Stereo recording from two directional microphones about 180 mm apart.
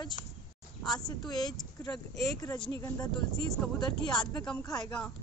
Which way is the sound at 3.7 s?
25° left (ahead or behind).